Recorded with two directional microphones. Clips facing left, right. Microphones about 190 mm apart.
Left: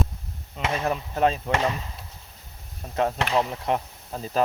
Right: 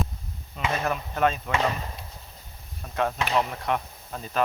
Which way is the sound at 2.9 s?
25° left (ahead or behind).